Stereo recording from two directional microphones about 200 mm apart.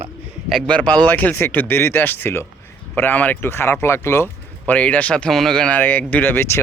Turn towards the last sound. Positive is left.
turn(degrees=10)  # may be behind; listen again after turning